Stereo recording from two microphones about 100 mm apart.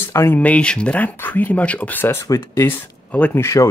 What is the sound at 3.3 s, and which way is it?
Speech, 30° left (ahead or behind).